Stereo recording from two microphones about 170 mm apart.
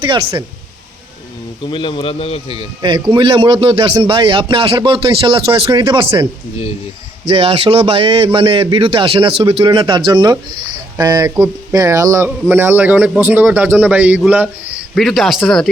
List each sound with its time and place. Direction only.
0.0 s speech: 30° right (ahead or behind)
1.6 s speech: 30° left (ahead or behind)
2.8 s speech: 30° right (ahead or behind)
7.3 s a man's voice: 35° right (ahead or behind); by 14.8 s 10° right (ahead or behind)
14.9 s speech: centre (ahead or behind)